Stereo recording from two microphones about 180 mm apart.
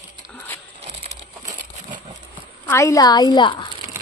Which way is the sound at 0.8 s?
35° right (ahead or behind).